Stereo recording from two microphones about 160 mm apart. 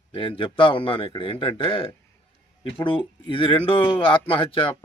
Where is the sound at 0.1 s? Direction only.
35° left (ahead or behind).